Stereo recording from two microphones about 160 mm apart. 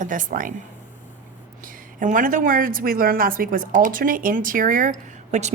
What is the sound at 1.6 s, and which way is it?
A woman's voice, 55° right (ahead or behind).